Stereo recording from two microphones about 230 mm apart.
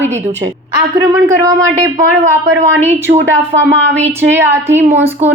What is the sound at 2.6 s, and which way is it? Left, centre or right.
Speech, right.